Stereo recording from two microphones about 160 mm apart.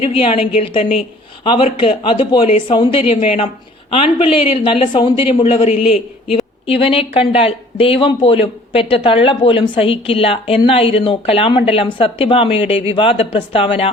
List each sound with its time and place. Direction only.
0.0 s speech: 35° left (ahead or behind)